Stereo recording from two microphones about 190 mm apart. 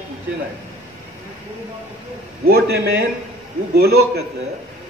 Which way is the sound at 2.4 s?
55° right (ahead or behind).